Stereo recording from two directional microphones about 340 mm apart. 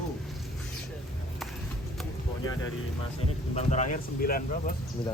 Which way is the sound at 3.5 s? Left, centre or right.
Centre.